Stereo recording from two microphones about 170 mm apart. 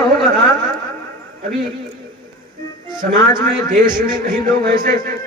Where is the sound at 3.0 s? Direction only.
55° right (ahead or behind).